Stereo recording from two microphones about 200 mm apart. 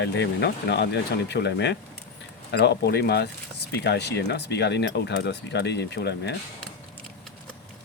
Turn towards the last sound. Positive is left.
turn(degrees=55)  # may be behind; listen again after turning